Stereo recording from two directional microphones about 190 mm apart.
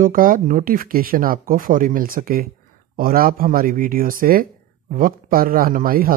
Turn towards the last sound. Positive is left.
turn(degrees=-50)  # may be behind; listen again after turning